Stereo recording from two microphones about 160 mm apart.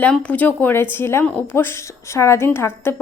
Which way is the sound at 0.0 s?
10° left (ahead or behind).